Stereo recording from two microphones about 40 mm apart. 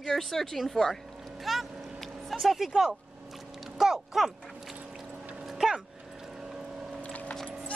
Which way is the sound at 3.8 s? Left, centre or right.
Centre.